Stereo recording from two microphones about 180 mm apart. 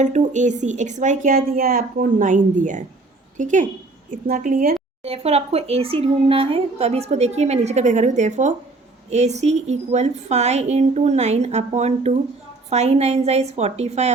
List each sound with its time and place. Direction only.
0.0 s speech: 40° right (ahead or behind)